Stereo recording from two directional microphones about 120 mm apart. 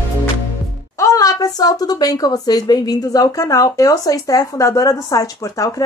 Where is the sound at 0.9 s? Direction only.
30° left (ahead or behind).